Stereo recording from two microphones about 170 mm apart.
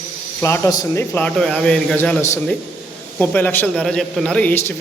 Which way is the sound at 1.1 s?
5° left (ahead or behind).